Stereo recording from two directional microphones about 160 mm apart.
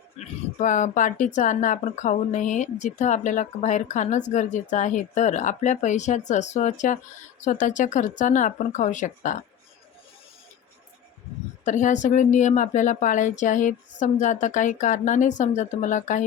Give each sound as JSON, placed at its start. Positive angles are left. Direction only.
{"t": 0.2, "sound": "speech", "side_deg": 45}
{"t": 11.6, "sound": "speech", "side_deg": 50}